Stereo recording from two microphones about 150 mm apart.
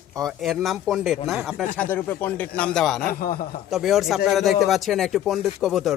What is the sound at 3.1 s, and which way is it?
Speech, 80° left.